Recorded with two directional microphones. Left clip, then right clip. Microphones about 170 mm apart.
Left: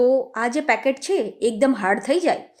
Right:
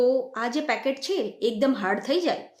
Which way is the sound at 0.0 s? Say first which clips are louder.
Left 4 dB; 40° left (ahead or behind).